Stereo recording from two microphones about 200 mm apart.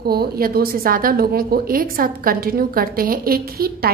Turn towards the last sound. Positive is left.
turn(degrees=-50)  # may be behind; listen again after turning